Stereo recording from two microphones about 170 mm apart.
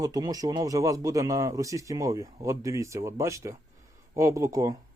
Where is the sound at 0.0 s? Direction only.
20° right (ahead or behind).